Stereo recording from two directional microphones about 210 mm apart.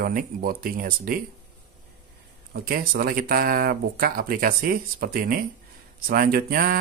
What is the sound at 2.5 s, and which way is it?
Speech, 45° right (ahead or behind).